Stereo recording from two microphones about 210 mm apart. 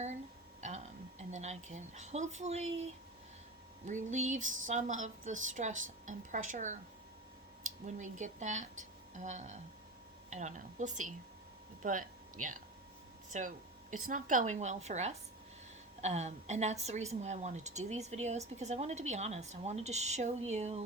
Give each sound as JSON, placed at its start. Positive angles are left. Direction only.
{"t": 1.3, "sound": "a woman's voice", "side_deg": -35}
{"t": 7.9, "sound": "a woman's voice", "side_deg": -35}